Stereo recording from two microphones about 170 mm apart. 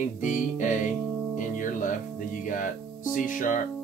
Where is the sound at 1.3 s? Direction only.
50° left (ahead or behind).